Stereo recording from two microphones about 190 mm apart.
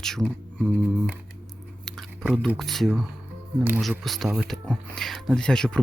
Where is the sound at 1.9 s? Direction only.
Centre (ahead or behind).